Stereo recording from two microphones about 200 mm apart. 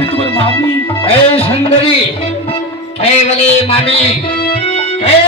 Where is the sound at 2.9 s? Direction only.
30° left (ahead or behind).